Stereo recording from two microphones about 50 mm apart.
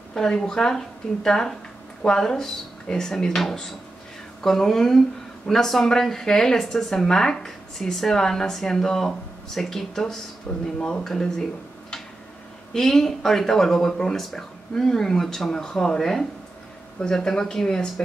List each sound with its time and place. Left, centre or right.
0.1 s a woman's voice: centre
10.5 s speech: left
10.8 s a woman's voice: centre
12.7 s a woman's voice: centre